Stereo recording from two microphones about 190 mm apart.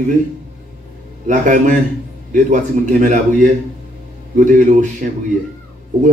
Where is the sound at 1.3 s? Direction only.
40° right (ahead or behind).